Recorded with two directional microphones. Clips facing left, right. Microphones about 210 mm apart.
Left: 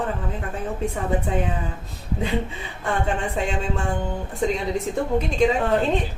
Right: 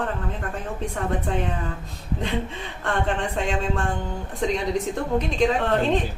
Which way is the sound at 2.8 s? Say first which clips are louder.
Even; 5° left (ahead or behind).